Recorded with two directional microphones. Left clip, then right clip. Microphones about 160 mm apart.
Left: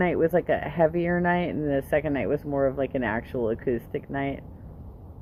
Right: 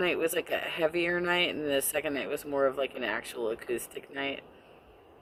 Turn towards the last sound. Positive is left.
turn(degrees=-20)  # may be behind; listen again after turning